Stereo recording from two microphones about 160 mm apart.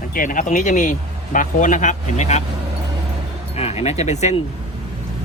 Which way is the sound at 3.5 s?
40° left (ahead or behind).